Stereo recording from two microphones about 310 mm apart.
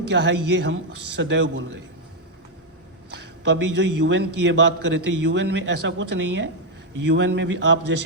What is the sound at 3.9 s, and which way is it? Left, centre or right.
A man's voice, right.